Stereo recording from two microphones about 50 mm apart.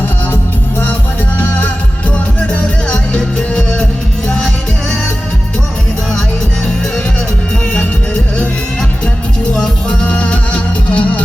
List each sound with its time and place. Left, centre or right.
1.4 s music: left
2.5 s music: left
10.1 s music: left